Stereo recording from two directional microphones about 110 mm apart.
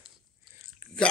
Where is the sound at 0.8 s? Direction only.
10° right (ahead or behind).